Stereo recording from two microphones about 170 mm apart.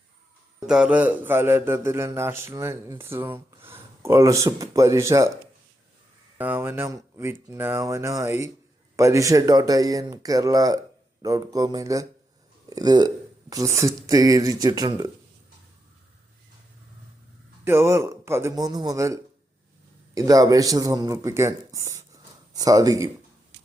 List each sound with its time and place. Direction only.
0.7 s a man's voice: 5° right (ahead or behind)
6.4 s a man's voice: 10° right (ahead or behind)
17.7 s a man's voice: 15° right (ahead or behind)